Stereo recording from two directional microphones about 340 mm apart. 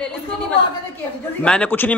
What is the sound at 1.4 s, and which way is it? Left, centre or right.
Speech, centre.